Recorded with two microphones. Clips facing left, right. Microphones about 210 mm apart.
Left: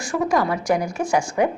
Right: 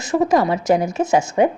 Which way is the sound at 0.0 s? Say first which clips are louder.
Right 4 dB; 20° right (ahead or behind).